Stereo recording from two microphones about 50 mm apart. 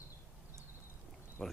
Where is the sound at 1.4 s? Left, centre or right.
Centre.